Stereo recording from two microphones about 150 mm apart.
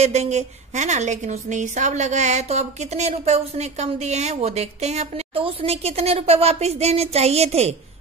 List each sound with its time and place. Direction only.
0.0 s a woman's voice: 45° right (ahead or behind)